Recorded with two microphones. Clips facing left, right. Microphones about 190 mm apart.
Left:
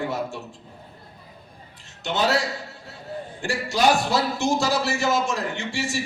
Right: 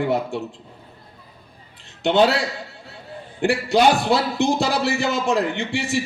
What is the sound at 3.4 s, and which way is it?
Speech, 60° right (ahead or behind).